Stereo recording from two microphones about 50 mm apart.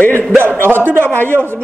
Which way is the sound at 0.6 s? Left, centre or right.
Right.